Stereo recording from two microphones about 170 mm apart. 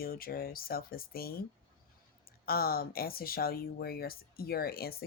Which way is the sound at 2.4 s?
60° left (ahead or behind).